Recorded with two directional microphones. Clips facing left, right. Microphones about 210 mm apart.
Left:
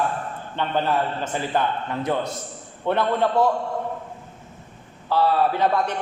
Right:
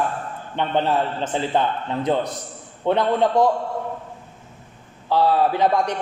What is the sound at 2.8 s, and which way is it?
Speech, 15° right (ahead or behind).